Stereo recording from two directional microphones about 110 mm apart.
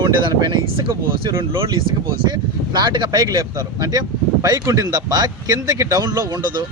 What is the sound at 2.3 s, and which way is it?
Speech, 40° right (ahead or behind).